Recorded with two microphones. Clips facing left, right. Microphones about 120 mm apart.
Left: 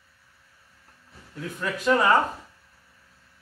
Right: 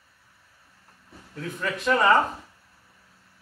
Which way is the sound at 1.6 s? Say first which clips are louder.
Left 1 dB; 5° left (ahead or behind).